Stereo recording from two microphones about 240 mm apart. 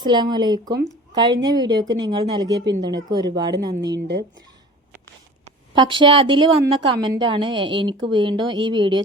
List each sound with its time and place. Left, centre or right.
0.0 s speech: centre
5.7 s a woman's voice: centre